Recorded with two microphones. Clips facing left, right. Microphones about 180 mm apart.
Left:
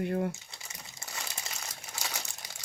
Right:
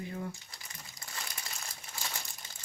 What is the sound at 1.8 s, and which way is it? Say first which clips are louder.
Crumpling: left 3 dB; 80° left.